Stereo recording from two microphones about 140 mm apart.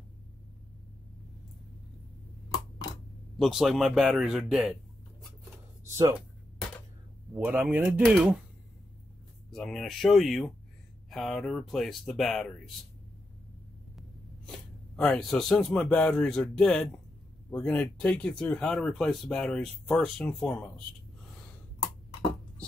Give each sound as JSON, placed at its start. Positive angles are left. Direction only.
{"t": 3.3, "sound": "a man's voice", "side_deg": 0}
{"t": 7.3, "sound": "speech", "side_deg": -15}
{"t": 8.1, "sound": "a man's voice", "side_deg": -5}
{"t": 9.5, "sound": "a man's voice", "side_deg": 5}
{"t": 15.0, "sound": "a man's voice", "side_deg": 5}